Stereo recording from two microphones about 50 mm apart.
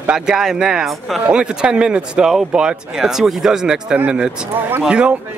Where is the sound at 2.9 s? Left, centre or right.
Centre.